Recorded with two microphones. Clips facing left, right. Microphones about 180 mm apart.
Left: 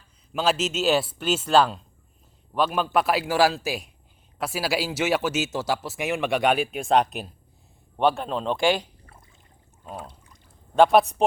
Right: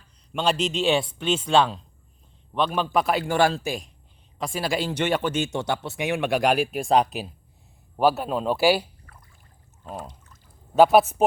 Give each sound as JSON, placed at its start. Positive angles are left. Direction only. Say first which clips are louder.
{"t": 0.3, "sound": "speech", "louder": "even", "side_deg": 5}
{"t": 9.1, "sound": "a sound", "louder": "left 1 dB", "side_deg": 25}
{"t": 10.8, "sound": "speech", "louder": "right 1 dB", "side_deg": -5}